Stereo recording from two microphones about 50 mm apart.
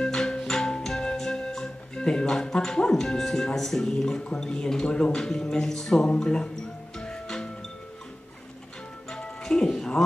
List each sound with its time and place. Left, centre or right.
0.0 s music: centre
4.4 s speech: centre
7.0 s music: centre
9.1 s music: centre